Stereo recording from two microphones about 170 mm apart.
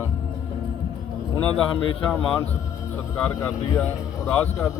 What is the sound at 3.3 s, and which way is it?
Speech, 15° left (ahead or behind).